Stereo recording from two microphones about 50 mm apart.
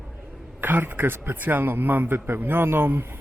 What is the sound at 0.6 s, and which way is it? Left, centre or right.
Speech, right.